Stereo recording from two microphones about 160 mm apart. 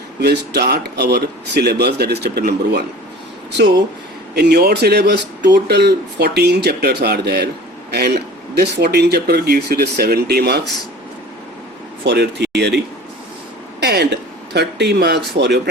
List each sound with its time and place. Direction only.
0.2 s speech: 90° right
4.4 s speech: 90° right
12.0 s speech: 90° right